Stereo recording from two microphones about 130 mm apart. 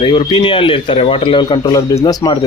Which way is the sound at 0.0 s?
40° left (ahead or behind).